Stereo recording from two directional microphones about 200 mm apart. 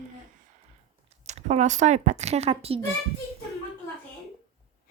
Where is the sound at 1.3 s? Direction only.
35° right (ahead or behind).